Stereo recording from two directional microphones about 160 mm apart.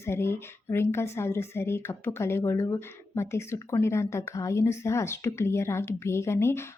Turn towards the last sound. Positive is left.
turn(degrees=15)  # may be behind; listen again after turning